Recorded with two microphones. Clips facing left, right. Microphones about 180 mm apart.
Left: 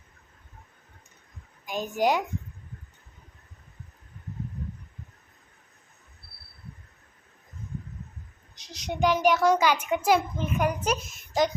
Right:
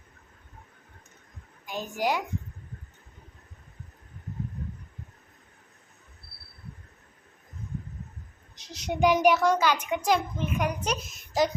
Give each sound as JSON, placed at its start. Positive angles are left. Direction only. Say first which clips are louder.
{"t": 1.6, "sound": "a woman's voice", "louder": "left 4 dB", "side_deg": 15}
{"t": 8.6, "sound": "child singing", "louder": "right 2 dB", "side_deg": -5}
{"t": 9.4, "sound": "a woman's voice", "louder": "left 2 dB", "side_deg": 10}